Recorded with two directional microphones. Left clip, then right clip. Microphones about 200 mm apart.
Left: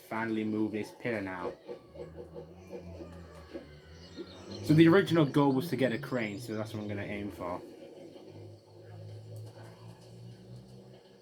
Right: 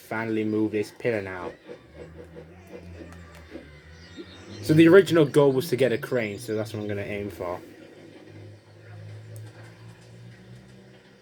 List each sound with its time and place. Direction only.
0.1 s speech: 55° right (ahead or behind)
4.8 s speech: 55° right (ahead or behind)